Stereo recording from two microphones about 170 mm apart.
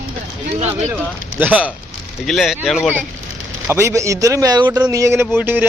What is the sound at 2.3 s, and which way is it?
Speech, centre (ahead or behind).